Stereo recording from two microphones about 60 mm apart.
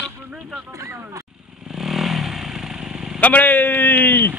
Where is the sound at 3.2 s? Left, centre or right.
Left.